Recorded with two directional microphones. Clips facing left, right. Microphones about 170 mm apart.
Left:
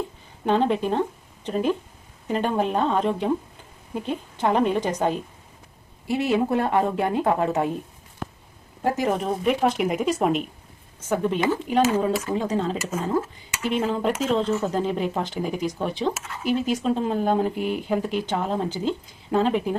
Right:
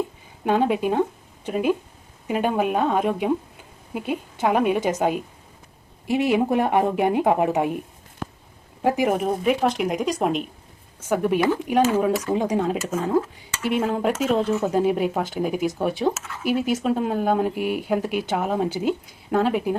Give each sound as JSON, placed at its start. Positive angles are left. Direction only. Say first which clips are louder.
{"t": 0.4, "sound": "speech", "louder": "right 1 dB", "side_deg": -10}
{"t": 8.8, "sound": "speech", "louder": "right 3 dB", "side_deg": -15}
{"t": 11.0, "sound": "speech", "louder": "right 2 dB", "side_deg": -10}